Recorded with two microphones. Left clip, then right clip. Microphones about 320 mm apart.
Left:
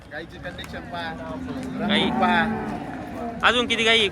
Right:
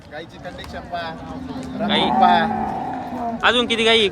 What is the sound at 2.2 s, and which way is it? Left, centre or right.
Speech, right.